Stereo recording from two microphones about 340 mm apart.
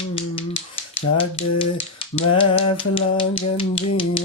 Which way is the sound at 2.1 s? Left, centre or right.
Centre.